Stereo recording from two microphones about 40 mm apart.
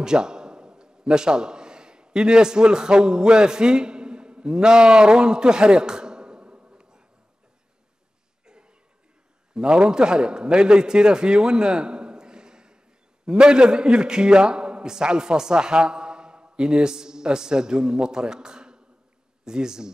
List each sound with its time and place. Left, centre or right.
0.0 s a man's voice: centre
8.5 s cough: right
9.5 s a man's voice: right